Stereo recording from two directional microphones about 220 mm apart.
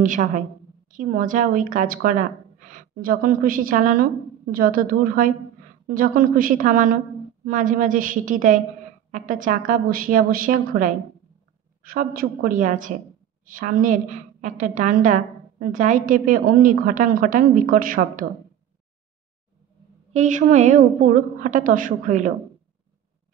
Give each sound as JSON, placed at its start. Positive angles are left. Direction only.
{"t": 0.0, "sound": "a woman's voice", "side_deg": -35}
{"t": 20.1, "sound": "a woman's voice", "side_deg": -35}